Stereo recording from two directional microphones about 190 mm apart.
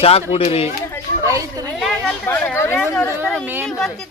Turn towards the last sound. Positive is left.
turn(degrees=10)  # may be behind; listen again after turning